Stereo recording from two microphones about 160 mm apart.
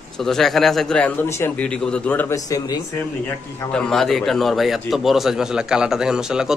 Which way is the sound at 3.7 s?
5° left (ahead or behind).